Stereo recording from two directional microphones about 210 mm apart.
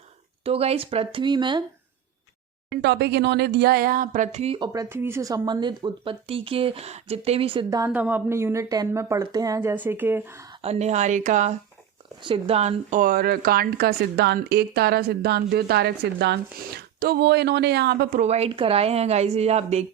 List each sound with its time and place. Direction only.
0.4 s speech: 30° right (ahead or behind)
2.6 s speech: 55° right (ahead or behind); by 10.4 s 10° right (ahead or behind)
10.6 s speech: 30° right (ahead or behind); by 18.2 s 50° right (ahead or behind)
18.2 s speech: 30° right (ahead or behind)